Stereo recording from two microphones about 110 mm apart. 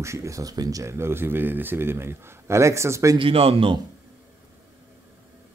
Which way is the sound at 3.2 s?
60° right (ahead or behind).